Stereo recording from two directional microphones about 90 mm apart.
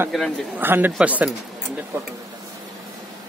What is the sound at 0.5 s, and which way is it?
Speech, 20° right (ahead or behind).